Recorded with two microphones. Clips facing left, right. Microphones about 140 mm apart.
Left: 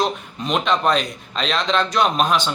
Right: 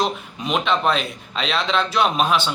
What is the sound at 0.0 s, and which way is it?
A man's voice, 5° right (ahead or behind).